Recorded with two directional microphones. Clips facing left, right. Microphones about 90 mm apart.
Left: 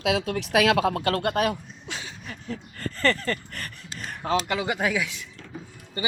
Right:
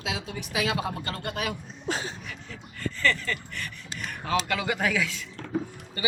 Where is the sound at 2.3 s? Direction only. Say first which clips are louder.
Left 6 dB; 40° left (ahead or behind).